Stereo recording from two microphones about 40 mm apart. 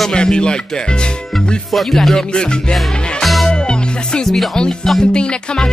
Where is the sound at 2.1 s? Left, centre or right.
Left.